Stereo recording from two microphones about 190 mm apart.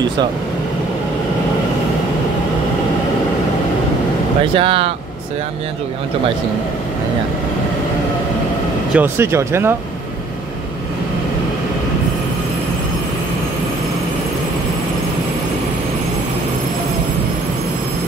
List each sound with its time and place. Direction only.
4.6 s speech: 30° right (ahead or behind)
8.9 s speech: 10° right (ahead or behind)